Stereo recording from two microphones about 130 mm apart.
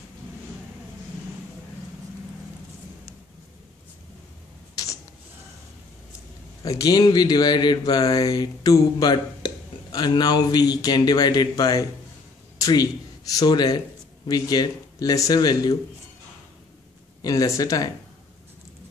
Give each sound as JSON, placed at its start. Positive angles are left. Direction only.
{"t": 4.8, "sound": "a sound", "side_deg": 25}
{"t": 6.6, "sound": "speech", "side_deg": 25}
{"t": 17.2, "sound": "speech", "side_deg": 25}